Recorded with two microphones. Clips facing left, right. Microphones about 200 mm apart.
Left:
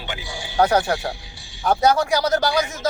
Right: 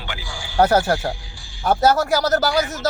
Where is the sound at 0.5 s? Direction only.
5° right (ahead or behind).